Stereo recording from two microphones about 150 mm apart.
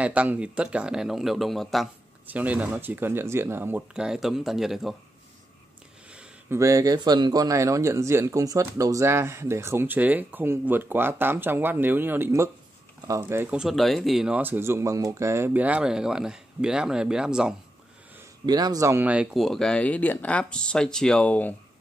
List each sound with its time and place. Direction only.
0.0 s speech: 10° right (ahead or behind)
2.2 s speech: 10° right (ahead or behind)
6.0 s a sound: 5° right (ahead or behind)
6.6 s speech: 25° right (ahead or behind); by 17.6 s 5° right (ahead or behind)
18.4 s a man's voice: 25° right (ahead or behind)
19.0 s speech: 5° right (ahead or behind)